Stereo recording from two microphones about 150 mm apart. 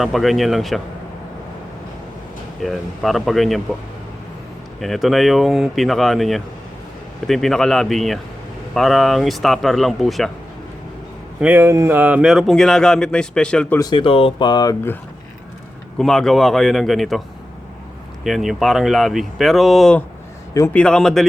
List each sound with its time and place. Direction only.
0.0 s speech: centre (ahead or behind)
2.6 s speech: centre (ahead or behind)
4.8 s speech: centre (ahead or behind)
11.3 s speech: 10° right (ahead or behind); by 13.7 s 5° left (ahead or behind)
13.7 s speech: 30° left (ahead or behind)
16.0 s speech: centre (ahead or behind)